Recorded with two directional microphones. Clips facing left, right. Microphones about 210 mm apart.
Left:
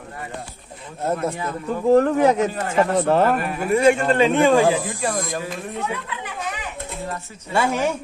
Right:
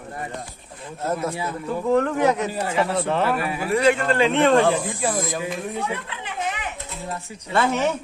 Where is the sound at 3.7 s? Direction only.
25° left (ahead or behind).